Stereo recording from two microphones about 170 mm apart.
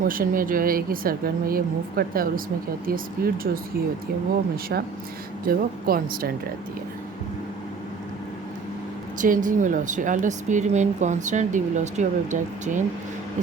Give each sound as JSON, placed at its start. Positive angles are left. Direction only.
{"t": 0.0, "sound": "speech", "side_deg": -55}
{"t": 5.5, "sound": "speech", "side_deg": -60}
{"t": 9.2, "sound": "speech", "side_deg": -50}